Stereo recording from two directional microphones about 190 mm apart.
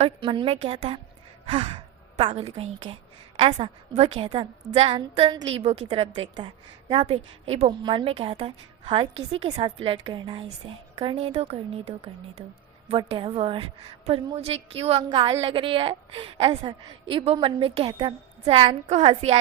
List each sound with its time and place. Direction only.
0.0 s a woman's voice: 25° right (ahead or behind)